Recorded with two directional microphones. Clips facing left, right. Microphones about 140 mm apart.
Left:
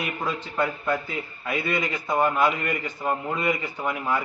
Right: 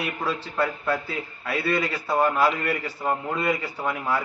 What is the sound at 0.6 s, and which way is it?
Speech, 15° left (ahead or behind).